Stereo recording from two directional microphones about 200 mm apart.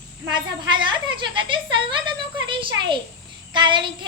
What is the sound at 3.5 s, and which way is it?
Child singing, 25° right (ahead or behind).